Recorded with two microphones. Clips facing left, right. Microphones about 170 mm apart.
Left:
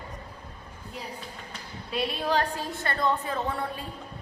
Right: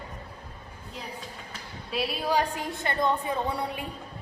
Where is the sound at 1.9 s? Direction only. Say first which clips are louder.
Even; 5° right (ahead or behind).